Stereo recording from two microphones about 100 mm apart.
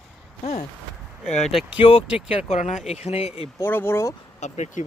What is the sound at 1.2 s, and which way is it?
Speech, 90° left.